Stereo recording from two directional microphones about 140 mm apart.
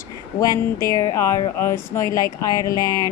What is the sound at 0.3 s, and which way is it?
Speech, 25° left (ahead or behind).